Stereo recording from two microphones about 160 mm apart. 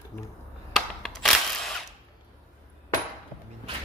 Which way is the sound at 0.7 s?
5° left (ahead or behind).